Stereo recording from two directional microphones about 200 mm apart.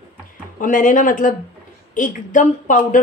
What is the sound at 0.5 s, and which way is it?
A woman's voice, 40° left (ahead or behind).